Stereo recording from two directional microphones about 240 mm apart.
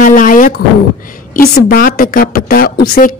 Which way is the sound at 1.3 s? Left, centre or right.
Left.